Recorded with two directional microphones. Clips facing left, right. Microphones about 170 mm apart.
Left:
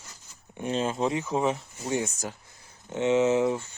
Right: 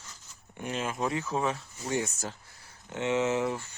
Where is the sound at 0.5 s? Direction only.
25° left (ahead or behind).